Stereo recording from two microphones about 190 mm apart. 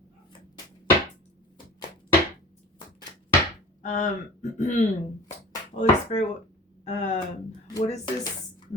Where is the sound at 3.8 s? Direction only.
40° left (ahead or behind).